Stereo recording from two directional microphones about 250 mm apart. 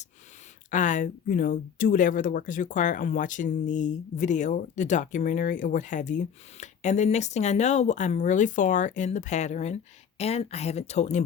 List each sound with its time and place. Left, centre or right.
0.7 s speech: left